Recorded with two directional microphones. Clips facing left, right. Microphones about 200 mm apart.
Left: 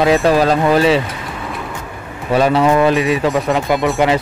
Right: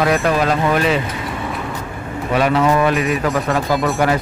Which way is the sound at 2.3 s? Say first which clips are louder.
Left 3 dB; 30° left (ahead or behind).